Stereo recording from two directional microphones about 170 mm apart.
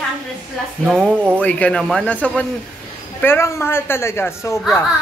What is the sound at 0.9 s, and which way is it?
Speech, centre (ahead or behind).